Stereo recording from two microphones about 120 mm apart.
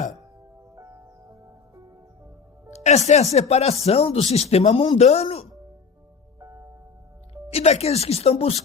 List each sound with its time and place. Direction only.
0.8 s music: 25° right (ahead or behind)
2.6 s music: 70° left (ahead or behind)
3.3 s speech: 60° left (ahead or behind)
6.4 s music: 25° right (ahead or behind)
7.5 s speech: 65° left (ahead or behind)